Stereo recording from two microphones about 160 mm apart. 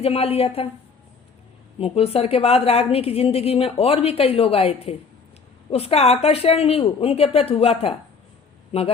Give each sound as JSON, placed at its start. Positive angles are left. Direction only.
{"t": 0.0, "sound": "a woman's voice", "side_deg": 40}
{"t": 1.8, "sound": "a woman's voice", "side_deg": 40}